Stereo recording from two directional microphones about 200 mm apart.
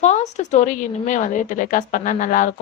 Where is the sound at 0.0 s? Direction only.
35° left (ahead or behind).